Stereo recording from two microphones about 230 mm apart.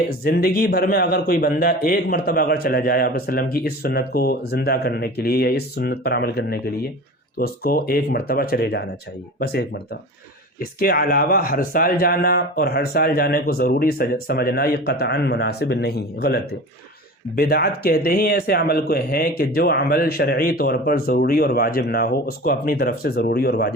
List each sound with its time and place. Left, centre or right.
0.3 s a man's voice: left